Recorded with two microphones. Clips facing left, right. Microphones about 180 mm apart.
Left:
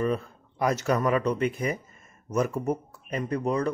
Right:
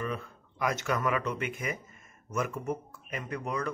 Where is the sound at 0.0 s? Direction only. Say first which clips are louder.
Left 8 dB; 35° left (ahead or behind).